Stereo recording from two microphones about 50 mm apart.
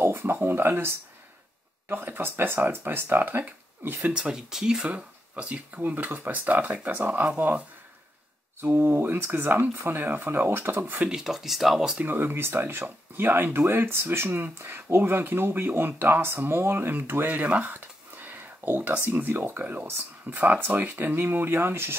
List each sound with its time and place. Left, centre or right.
0.0 s speech: right
4.1 s speech: centre
4.8 s speech: right
5.8 s speech: right
8.5 s speech: right
11.1 s speech: centre
12.0 s speech: right
12.8 s speech: right